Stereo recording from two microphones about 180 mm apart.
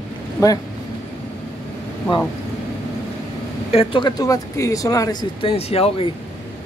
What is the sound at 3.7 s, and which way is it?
Speech, 30° left (ahead or behind).